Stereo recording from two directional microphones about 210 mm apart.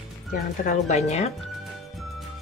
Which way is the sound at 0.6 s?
35° left (ahead or behind).